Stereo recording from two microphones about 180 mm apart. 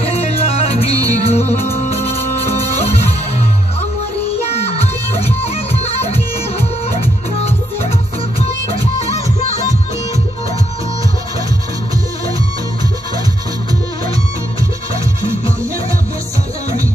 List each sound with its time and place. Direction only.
0.0 s music: 35° left (ahead or behind)
4.5 s music: 35° left (ahead or behind)